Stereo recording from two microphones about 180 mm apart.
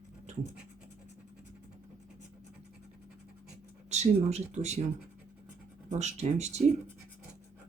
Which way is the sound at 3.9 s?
40° right (ahead or behind).